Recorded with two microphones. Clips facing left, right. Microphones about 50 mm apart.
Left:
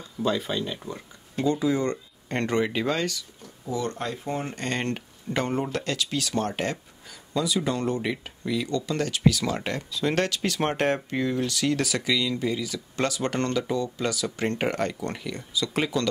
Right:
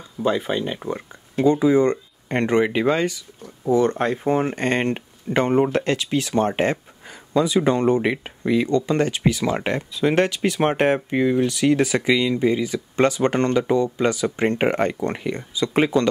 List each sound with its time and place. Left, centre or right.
0.2 s speech: right
3.6 s speech: right